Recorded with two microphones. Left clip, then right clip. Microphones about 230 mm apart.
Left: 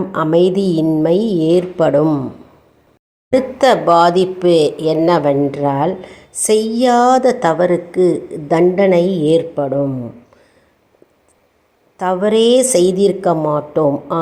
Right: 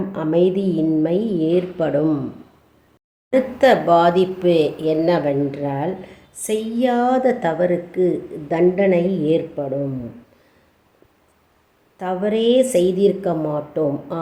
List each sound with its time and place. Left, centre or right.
0.1 s speech: left
3.2 s speech: centre
11.9 s speech: left